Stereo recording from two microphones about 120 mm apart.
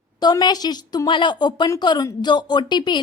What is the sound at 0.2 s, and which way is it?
A woman's voice, 35° left (ahead or behind).